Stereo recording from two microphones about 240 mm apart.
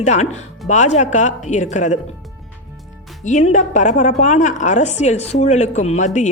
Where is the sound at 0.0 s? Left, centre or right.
Left.